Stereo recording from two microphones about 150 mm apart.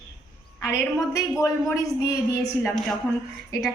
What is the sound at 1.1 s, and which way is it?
A man's voice, 20° left (ahead or behind).